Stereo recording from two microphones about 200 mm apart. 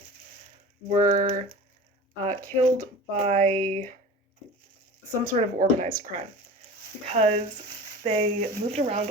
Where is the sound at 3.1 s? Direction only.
35° right (ahead or behind).